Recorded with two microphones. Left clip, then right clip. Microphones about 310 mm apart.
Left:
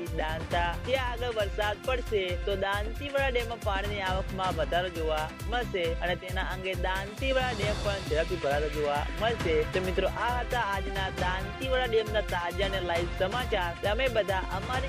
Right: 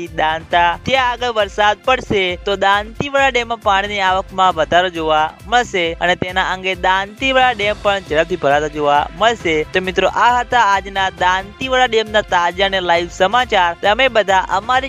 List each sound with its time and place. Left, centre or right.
0.2 s music: right